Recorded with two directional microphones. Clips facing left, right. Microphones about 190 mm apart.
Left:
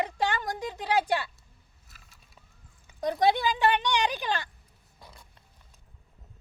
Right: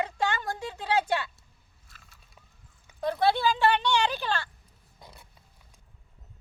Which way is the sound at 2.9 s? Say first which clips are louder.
Left 1 dB; 15° left (ahead or behind).